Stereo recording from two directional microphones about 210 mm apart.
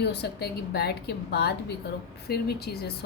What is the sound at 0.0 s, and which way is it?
A woman's voice, 55° left (ahead or behind).